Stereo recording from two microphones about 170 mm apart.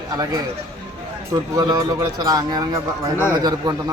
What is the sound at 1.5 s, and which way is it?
A man's voice, 20° right (ahead or behind).